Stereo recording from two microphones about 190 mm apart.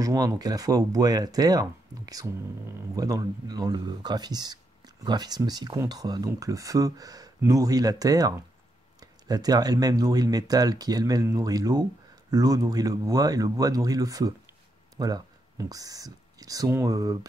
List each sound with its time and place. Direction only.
0.0 s speech: 20° right (ahead or behind)